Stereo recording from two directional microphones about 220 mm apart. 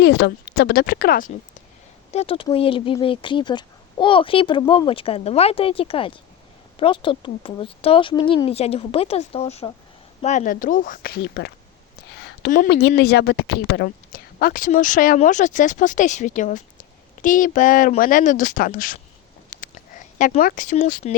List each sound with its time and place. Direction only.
0.0 s speech: 50° left (ahead or behind)
2.1 s a woman's voice: 25° left (ahead or behind)
19.5 s a sound: 35° left (ahead or behind)
20.1 s a woman's voice: 35° left (ahead or behind)